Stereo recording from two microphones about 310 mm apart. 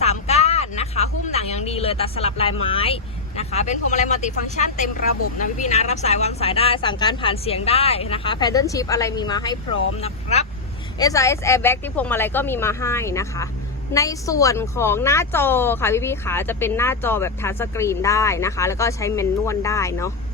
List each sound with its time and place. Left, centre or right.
0.0 s a woman's voice: left
10.9 s a woman's voice: centre